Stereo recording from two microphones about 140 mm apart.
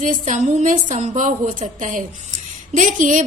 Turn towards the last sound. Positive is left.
turn(degrees=-65)  # may be behind; listen again after turning